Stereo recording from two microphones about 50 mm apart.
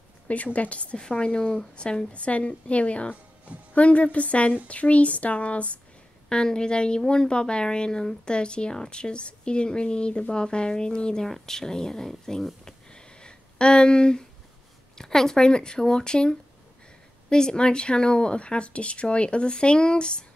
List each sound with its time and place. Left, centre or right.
0.3 s speech: left
6.2 s speech: centre
12.6 s a sound: centre
15.0 s speech: centre